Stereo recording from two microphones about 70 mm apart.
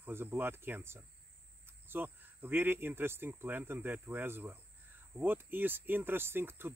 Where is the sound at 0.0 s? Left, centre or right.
Right.